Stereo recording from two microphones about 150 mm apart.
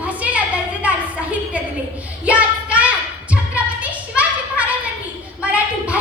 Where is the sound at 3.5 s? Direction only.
10° right (ahead or behind).